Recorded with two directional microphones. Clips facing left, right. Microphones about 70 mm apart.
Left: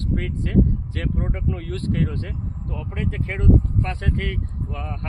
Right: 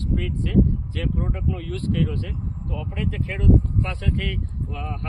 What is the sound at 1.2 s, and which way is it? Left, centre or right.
Speech, left.